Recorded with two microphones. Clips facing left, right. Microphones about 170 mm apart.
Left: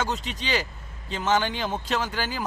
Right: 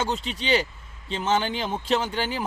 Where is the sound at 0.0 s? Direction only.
30° right (ahead or behind).